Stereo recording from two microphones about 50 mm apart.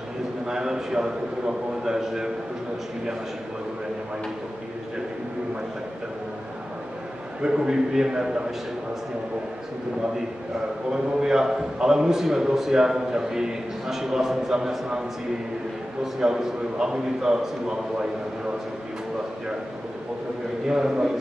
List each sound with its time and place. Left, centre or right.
0.5 s a man's voice: centre
7.4 s a man's voice: centre
10.9 s a man's voice: centre
16.2 s a man's voice: centre
20.6 s a man's voice: centre